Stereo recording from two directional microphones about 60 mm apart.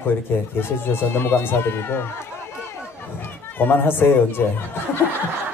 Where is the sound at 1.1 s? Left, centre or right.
Left.